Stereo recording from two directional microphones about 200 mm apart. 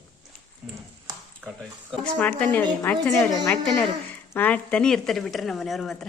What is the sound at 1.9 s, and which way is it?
A woman's voice, 5° left (ahead or behind).